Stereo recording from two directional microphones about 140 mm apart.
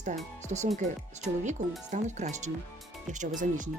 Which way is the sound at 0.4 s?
55° right (ahead or behind).